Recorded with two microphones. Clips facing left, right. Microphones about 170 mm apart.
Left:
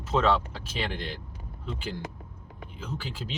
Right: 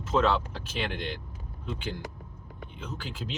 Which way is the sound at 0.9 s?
Centre (ahead or behind).